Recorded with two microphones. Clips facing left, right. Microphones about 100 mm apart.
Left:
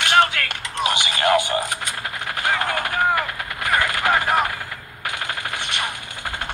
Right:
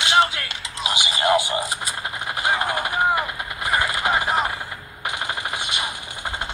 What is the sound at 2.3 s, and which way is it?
Machine gun, 20° right (ahead or behind).